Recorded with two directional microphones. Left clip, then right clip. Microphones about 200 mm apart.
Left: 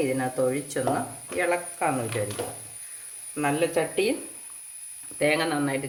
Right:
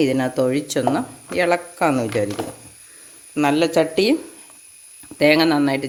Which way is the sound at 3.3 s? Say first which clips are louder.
Right 8 dB; 60° right (ahead or behind).